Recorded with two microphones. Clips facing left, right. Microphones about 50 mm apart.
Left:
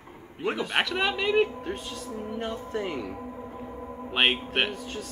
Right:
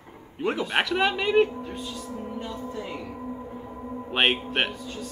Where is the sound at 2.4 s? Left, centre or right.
Left.